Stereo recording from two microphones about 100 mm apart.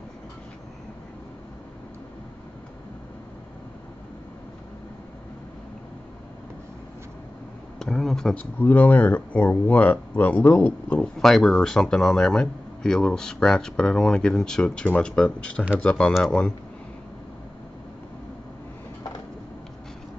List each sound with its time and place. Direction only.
7.8 s speech: centre (ahead or behind)
8.5 s speech: 20° left (ahead or behind)